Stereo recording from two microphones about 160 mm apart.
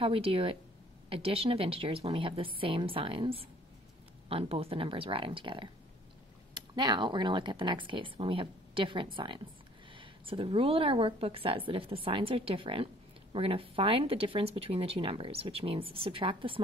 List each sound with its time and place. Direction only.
0.0 s a woman's voice: 35° right (ahead or behind)